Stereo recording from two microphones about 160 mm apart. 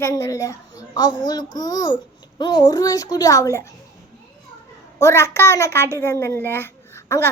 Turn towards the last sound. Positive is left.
turn(degrees=15)  # may be behind; listen again after turning